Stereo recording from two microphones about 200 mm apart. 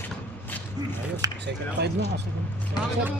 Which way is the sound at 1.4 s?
60° right (ahead or behind).